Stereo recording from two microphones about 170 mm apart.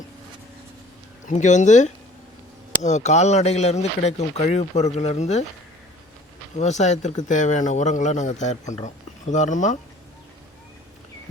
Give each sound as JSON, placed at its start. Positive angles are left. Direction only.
{"t": 1.4, "sound": "speech", "side_deg": 45}
{"t": 6.6, "sound": "speech", "side_deg": 45}